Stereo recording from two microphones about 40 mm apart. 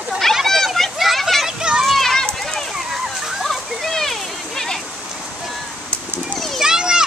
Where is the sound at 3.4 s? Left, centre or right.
Centre.